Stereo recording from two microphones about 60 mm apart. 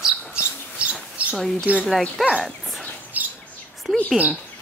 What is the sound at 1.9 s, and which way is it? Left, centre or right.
Speech, centre.